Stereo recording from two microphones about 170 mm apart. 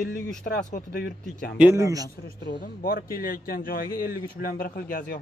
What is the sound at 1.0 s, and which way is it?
Speech, 65° left (ahead or behind).